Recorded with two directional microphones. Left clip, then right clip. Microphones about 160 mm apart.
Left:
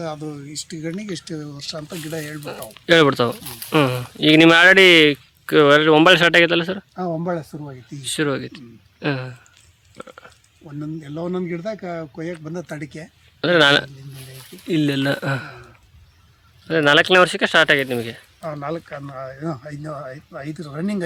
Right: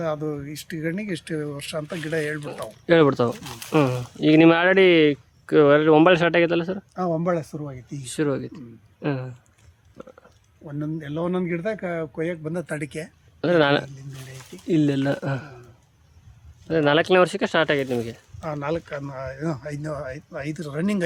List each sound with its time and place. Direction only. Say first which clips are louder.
0.5 s speech: even; 65° right (ahead or behind); by 1.5 s 45° right (ahead or behind)
1.7 s speech: right 3 dB; 25° right (ahead or behind)
2.4 s speech: left 1 dB; centre (ahead or behind)
10.0 s a sound: left 5 dB; 10° left (ahead or behind)
11.0 s speech: even; 65° right (ahead or behind); by 13.1 s 45° right (ahead or behind)
13.4 s speech: left 5 dB; 5° right (ahead or behind)
14.2 s a sound: left 1 dB; 10° left (ahead or behind)
14.7 s speech: left 2 dB; 10° right (ahead or behind)
16.6 s speech: left 4 dB; centre (ahead or behind)
18.4 s speech: even; 40° right (ahead or behind)
19.6 s speech: right 1 dB; 15° right (ahead or behind)